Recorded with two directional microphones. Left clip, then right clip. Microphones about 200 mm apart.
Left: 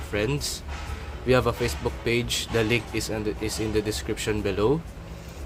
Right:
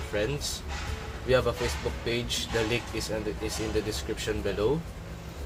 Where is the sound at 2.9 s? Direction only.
50° left (ahead or behind).